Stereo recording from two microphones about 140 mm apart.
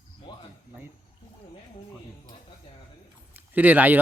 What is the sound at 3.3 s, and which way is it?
Speech, 15° right (ahead or behind).